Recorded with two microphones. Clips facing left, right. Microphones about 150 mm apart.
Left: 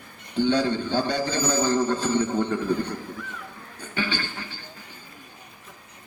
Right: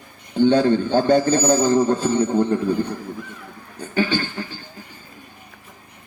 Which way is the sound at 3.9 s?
45° right (ahead or behind).